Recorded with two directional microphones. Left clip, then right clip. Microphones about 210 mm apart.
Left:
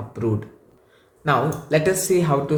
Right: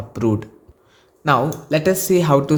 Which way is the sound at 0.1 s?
45° right (ahead or behind).